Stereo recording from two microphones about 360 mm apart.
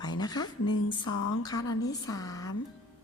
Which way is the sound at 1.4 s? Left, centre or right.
Centre.